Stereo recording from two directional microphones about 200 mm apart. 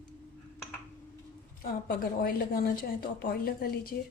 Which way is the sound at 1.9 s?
45° left (ahead or behind).